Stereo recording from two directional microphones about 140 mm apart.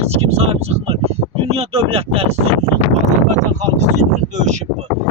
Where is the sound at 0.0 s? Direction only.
50° right (ahead or behind).